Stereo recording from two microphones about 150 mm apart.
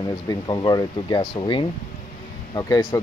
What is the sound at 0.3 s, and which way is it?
Speech, 30° left (ahead or behind).